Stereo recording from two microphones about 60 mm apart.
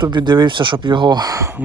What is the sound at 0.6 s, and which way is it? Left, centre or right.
Speech, right.